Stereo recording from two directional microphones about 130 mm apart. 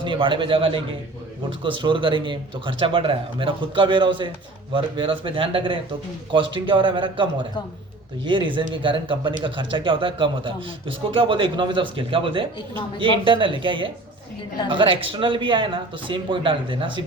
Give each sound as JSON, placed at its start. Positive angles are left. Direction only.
{"t": 0.0, "sound": "a man's voice", "side_deg": -40}